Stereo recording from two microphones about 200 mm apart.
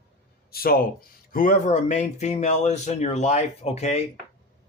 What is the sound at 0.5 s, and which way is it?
Speech, 50° left (ahead or behind).